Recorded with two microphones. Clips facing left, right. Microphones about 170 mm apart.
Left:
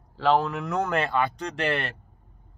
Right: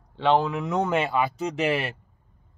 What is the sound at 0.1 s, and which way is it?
Speech, centre (ahead or behind).